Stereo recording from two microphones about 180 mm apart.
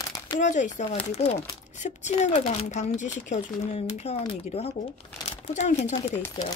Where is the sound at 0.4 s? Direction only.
45° left (ahead or behind).